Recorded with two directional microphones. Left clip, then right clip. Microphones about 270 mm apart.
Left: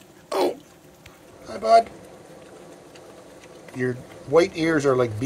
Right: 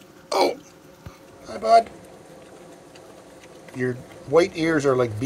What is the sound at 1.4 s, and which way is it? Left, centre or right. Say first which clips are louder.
Vehicle: even; centre.